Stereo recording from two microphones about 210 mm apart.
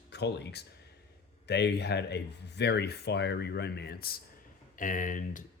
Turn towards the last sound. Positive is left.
turn(degrees=40)  # may be behind; listen again after turning